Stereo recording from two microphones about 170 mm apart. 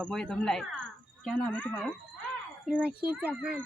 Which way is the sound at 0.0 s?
5° left (ahead or behind).